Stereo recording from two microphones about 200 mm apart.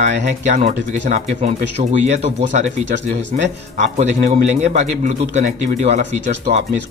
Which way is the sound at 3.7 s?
35° right (ahead or behind).